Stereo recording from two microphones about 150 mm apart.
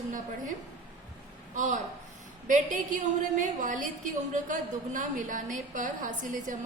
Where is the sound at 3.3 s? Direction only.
60° right (ahead or behind).